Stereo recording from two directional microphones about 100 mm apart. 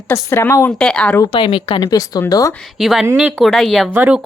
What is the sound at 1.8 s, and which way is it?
Speech, 40° left (ahead or behind).